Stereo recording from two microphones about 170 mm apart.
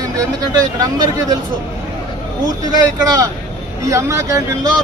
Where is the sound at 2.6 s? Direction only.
20° right (ahead or behind).